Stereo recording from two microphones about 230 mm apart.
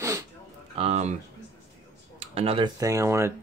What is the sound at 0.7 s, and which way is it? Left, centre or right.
Speech, right.